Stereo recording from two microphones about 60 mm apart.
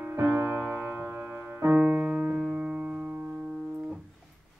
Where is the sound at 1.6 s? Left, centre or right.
Right.